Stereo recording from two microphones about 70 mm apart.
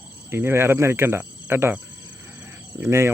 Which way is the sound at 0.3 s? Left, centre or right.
Right.